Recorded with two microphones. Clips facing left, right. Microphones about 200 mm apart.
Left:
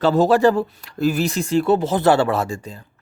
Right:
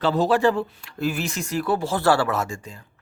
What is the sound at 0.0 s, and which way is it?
Speech, 45° left (ahead or behind).